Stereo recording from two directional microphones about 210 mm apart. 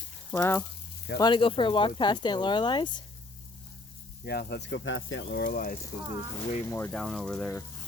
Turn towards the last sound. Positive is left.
turn(degrees=0)  # may be behind; listen again after turning